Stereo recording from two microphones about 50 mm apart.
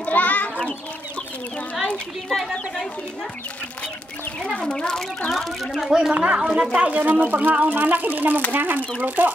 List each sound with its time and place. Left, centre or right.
0.0 s a sound: left
2.2 s speech: centre
4.4 s speech: centre
5.9 s speech: centre
6.1 s speech: right
6.9 s speech: right